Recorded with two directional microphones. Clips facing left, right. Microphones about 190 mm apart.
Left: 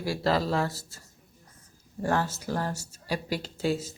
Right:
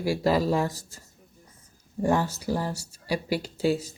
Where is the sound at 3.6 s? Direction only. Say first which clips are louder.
Right 3 dB; 35° right (ahead or behind).